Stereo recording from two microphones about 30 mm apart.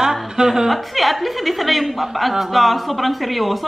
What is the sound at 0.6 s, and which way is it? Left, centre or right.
A woman's voice, centre.